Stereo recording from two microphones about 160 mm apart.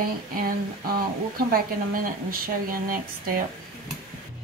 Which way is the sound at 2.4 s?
60° right (ahead or behind).